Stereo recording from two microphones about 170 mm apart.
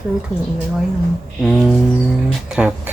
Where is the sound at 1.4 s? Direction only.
Centre (ahead or behind).